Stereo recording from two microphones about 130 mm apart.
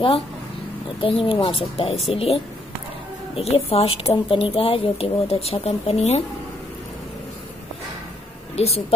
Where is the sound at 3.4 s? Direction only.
50° left (ahead or behind).